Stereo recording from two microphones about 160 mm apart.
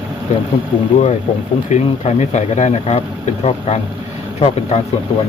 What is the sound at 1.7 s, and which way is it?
Speech, 45° left (ahead or behind).